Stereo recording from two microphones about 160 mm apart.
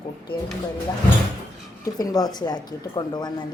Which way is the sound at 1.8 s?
25° left (ahead or behind).